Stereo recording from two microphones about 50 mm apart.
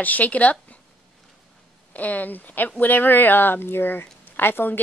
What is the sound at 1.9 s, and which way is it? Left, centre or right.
Speech, left.